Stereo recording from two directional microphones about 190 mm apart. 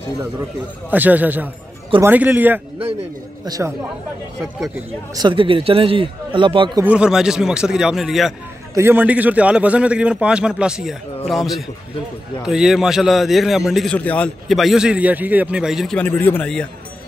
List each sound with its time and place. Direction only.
0.8 s a man's voice: 10° right (ahead or behind)
5.1 s a man's voice: 25° right (ahead or behind)
6.8 s a man's voice: 5° right (ahead or behind)
8.7 s a man's voice: 10° right (ahead or behind); by 16.6 s 5° left (ahead or behind)